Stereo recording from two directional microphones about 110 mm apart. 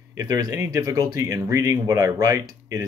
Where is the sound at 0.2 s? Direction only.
35° right (ahead or behind).